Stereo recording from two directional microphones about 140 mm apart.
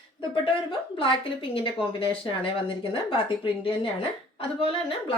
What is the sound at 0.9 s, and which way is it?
Speech, 40° left (ahead or behind).